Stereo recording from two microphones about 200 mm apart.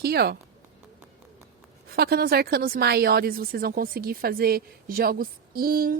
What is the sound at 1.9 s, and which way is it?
Speech, 50° right (ahead or behind).